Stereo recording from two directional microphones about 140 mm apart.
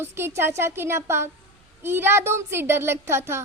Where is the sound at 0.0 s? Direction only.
15° right (ahead or behind).